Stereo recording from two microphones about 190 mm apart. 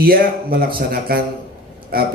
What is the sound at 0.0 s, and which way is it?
A man's voice, 50° right (ahead or behind).